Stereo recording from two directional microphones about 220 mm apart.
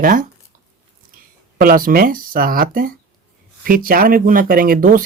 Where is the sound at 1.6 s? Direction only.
40° right (ahead or behind).